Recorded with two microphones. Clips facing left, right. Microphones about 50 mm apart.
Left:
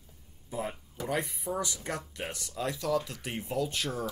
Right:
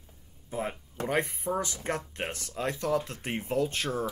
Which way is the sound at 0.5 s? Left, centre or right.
Right.